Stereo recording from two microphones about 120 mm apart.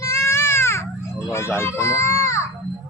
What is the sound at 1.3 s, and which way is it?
A child's voice, 25° left (ahead or behind).